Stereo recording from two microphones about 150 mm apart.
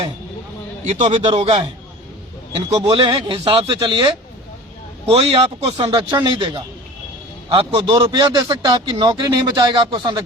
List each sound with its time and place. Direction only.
1.0 s a man's voice: 35° right (ahead or behind)
1.4 s a man's voice: 45° right (ahead or behind)
2.7 s a man's voice: 35° right (ahead or behind)